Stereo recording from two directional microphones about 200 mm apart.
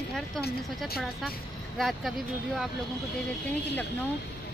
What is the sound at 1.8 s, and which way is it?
Speech, centre (ahead or behind).